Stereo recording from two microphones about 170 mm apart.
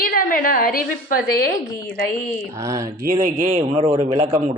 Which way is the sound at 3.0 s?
50° right (ahead or behind).